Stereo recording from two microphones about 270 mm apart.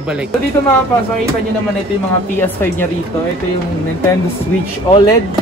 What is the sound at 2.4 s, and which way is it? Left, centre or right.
Speech, centre.